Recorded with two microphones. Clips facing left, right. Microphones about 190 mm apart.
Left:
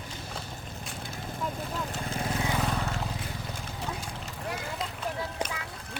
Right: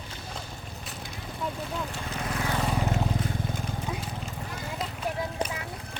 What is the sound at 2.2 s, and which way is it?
Vehicle, 25° left (ahead or behind).